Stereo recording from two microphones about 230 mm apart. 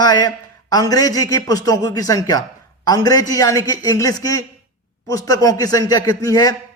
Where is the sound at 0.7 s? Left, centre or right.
Centre.